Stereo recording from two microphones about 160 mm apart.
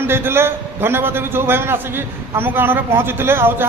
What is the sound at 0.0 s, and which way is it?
A man's voice, 15° right (ahead or behind).